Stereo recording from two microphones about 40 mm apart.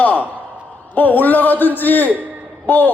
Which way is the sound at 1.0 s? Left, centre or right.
Left.